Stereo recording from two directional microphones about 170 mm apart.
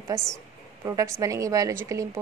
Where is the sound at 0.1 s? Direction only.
20° right (ahead or behind).